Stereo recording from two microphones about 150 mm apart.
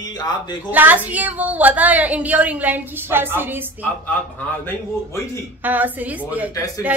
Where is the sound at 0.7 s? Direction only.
10° right (ahead or behind).